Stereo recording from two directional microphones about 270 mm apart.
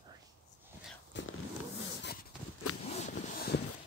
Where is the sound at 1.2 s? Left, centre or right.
Left.